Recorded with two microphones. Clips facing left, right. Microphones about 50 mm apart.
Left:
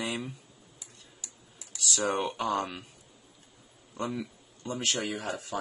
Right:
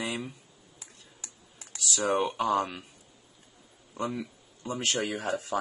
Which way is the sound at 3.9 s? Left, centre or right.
Centre.